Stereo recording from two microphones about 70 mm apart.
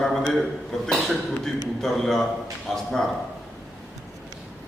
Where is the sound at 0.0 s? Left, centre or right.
Centre.